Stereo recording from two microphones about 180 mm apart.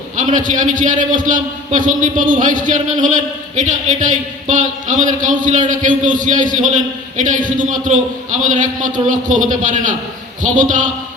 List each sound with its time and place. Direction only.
0.2 s a man's voice: 45° right (ahead or behind)